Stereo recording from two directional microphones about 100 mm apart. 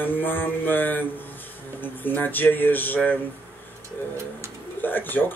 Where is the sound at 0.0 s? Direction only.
20° left (ahead or behind).